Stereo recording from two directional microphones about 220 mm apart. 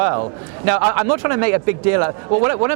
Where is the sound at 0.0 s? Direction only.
25° right (ahead or behind).